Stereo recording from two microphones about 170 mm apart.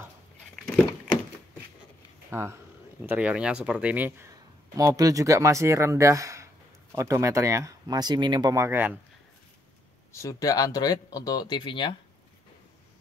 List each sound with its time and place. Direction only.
2.3 s speech: 15° right (ahead or behind)
10.1 s speech: 20° left (ahead or behind)